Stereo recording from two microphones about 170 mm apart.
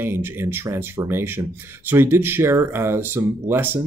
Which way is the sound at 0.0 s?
15° right (ahead or behind).